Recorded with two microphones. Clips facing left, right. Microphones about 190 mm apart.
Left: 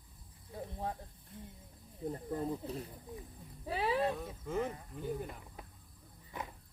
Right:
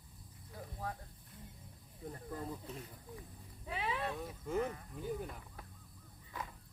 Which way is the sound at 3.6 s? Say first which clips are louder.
Left 7 dB; 35° left (ahead or behind).